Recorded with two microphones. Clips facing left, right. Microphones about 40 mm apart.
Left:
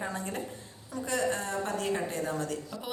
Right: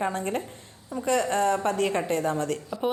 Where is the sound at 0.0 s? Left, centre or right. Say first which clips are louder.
Right 7 dB; right.